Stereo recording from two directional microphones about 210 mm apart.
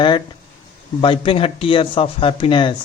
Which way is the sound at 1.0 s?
25° left (ahead or behind).